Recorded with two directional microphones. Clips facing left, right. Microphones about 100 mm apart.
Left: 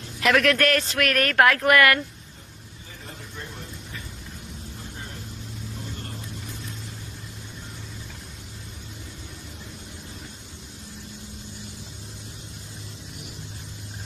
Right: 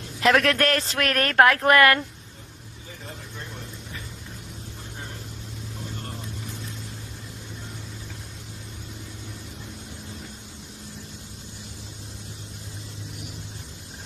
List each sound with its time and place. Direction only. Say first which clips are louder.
0.2 s speech: even; 30° right (ahead or behind)